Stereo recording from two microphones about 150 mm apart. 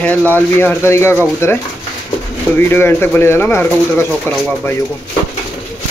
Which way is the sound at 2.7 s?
15° left (ahead or behind).